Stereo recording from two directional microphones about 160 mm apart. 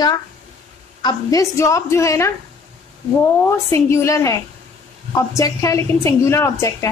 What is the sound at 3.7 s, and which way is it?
A woman's voice, 15° left (ahead or behind).